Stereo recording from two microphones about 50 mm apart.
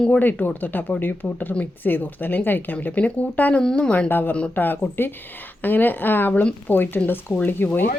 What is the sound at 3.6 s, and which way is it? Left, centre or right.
Speech, centre.